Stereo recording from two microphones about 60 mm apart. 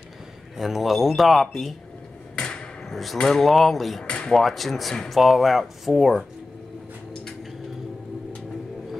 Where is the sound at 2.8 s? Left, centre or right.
Centre.